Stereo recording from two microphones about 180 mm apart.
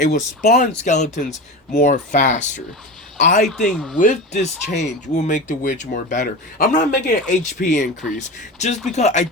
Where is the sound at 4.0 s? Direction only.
45° left (ahead or behind).